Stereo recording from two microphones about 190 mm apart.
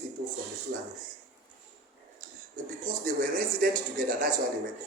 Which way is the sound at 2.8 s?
45° right (ahead or behind).